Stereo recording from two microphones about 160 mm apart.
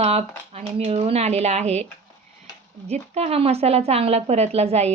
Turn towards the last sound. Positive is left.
turn(degrees=-40)  # may be behind; listen again after turning